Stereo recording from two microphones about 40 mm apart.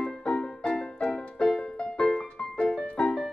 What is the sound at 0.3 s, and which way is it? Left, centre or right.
Music, left.